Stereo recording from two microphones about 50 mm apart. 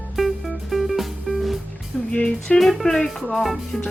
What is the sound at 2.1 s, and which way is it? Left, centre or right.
Music, left.